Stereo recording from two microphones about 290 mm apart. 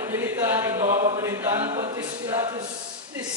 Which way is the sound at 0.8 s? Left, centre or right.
Right.